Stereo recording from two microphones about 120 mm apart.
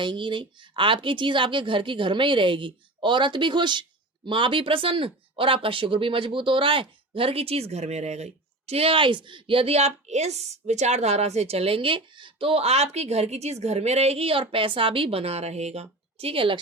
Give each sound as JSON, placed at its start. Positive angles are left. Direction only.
{"t": 0.0, "sound": "a woman's voice", "side_deg": -40}